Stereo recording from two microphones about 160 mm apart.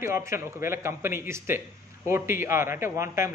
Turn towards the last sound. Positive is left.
turn(degrees=-15)  # may be behind; listen again after turning